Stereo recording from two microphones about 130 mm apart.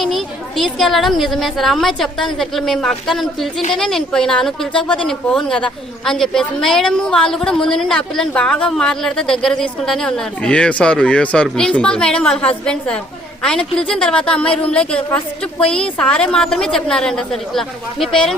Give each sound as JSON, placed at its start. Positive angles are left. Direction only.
{"t": 0.0, "sound": "a woman's voice", "side_deg": 0}